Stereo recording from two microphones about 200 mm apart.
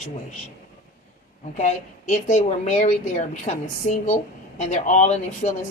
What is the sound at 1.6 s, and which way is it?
A woman's voice, 35° left (ahead or behind).